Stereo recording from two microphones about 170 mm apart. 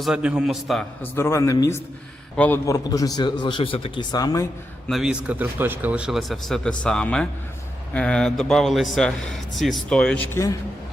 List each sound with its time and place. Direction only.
0.0 s speech: 5° right (ahead or behind)
1.1 s speech: 15° left (ahead or behind)
2.3 s a man's voice: 10° left (ahead or behind)
2.6 s a man's voice: 20° left (ahead or behind)
4.9 s speech: centre (ahead or behind)